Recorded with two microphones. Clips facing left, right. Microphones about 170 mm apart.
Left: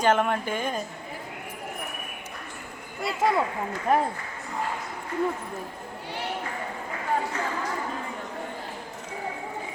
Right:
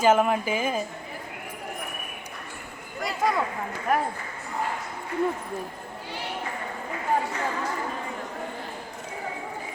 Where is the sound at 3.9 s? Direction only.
25° left (ahead or behind).